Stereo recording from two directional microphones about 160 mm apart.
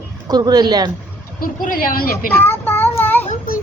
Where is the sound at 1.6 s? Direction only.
60° left (ahead or behind).